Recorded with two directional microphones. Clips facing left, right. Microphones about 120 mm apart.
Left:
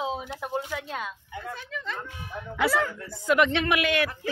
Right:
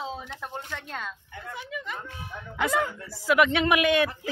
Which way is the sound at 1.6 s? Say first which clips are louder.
Even; 10° right (ahead or behind).